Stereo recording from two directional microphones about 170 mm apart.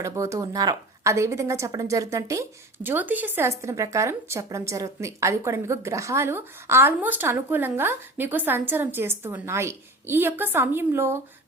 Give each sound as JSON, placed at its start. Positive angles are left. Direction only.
{"t": 0.0, "sound": "a woman's voice", "side_deg": -15}